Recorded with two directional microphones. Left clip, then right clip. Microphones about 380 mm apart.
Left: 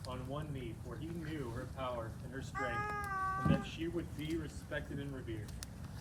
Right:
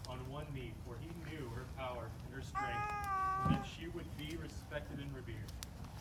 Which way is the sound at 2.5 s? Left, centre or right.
Right.